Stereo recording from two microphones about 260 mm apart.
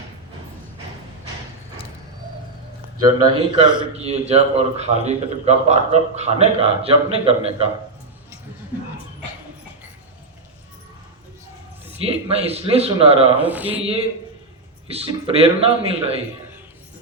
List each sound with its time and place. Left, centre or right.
3.2 s a man's voice: centre
11.9 s a man's voice: right
13.4 s speech: centre
14.8 s a man's voice: right